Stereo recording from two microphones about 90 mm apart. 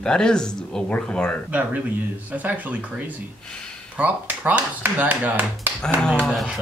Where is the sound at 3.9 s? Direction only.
20° right (ahead or behind).